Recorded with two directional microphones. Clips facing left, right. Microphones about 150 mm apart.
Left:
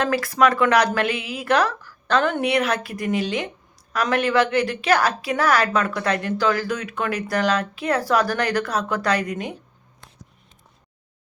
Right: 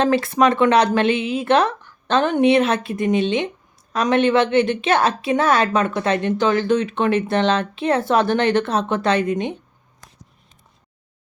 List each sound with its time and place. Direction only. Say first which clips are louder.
0.0 s a woman's voice: right 3 dB; 25° right (ahead or behind)